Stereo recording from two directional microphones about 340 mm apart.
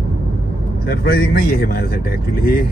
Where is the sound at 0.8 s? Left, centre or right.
Left.